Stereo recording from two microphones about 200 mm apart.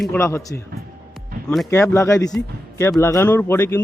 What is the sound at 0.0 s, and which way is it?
A man's voice, 10° left (ahead or behind).